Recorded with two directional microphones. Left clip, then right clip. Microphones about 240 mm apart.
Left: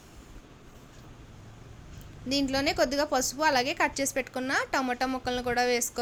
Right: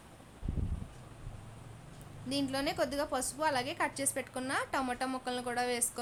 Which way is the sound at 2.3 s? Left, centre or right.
Centre.